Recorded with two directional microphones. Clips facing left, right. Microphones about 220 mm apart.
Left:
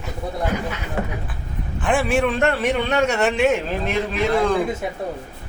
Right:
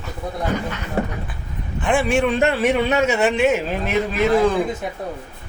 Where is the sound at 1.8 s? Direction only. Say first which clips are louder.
Right 1 dB; centre (ahead or behind).